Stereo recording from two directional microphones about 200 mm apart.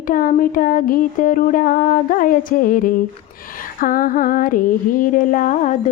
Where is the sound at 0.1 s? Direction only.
45° left (ahead or behind).